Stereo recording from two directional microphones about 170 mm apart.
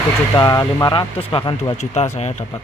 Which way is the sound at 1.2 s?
35° left (ahead or behind).